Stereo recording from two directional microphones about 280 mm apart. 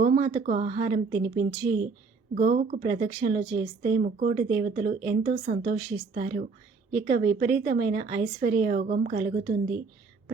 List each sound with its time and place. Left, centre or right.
0.0 s a woman's voice: right